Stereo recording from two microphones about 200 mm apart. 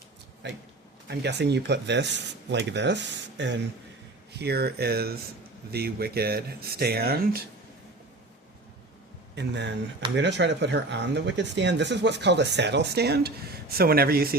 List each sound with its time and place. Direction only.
0.4 s speech: 60° right (ahead or behind)
9.3 s speech: 60° right (ahead or behind)